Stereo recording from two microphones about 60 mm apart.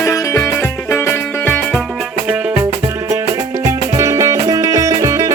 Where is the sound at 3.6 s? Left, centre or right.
Right.